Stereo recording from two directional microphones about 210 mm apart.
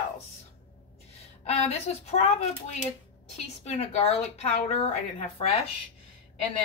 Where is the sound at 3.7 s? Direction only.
30° left (ahead or behind).